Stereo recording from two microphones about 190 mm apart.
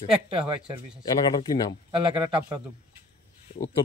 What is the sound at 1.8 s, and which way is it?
Speech, 25° right (ahead or behind).